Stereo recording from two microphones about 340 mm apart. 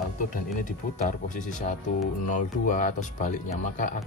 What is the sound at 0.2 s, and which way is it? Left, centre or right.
Speech, left.